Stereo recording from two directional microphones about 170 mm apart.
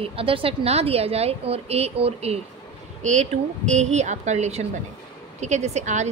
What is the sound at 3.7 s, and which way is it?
Speech, 40° right (ahead or behind).